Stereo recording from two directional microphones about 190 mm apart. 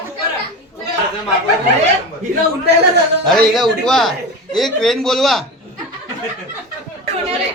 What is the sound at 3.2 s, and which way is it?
A man's voice, centre (ahead or behind).